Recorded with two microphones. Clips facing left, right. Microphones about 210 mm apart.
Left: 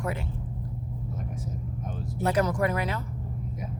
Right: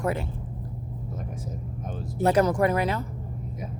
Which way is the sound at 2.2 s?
30° right (ahead or behind).